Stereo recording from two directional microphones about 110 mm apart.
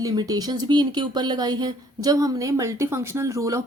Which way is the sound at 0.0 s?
35° right (ahead or behind).